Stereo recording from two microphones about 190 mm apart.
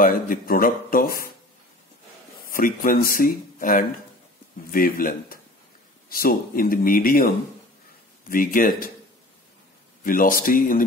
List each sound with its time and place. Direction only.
0.0 s speech: 50° left (ahead or behind)
2.5 s speech: 50° left (ahead or behind)
10.0 s speech: 50° left (ahead or behind)